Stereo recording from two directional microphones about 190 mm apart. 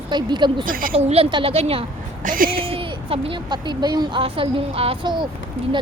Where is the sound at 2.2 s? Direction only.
45° right (ahead or behind).